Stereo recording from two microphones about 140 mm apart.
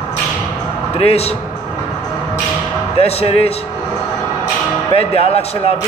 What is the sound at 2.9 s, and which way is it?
Speech, 45° left (ahead or behind).